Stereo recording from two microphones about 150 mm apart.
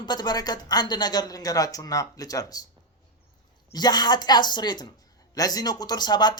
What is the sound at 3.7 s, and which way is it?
A woman's voice, 30° left (ahead or behind).